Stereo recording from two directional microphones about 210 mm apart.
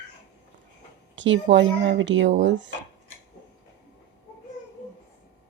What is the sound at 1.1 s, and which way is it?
Speech, 60° right (ahead or behind).